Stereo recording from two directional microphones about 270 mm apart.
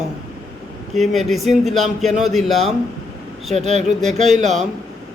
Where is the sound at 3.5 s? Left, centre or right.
Right.